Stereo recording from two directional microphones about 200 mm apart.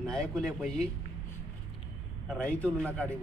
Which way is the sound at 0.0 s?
5° left (ahead or behind).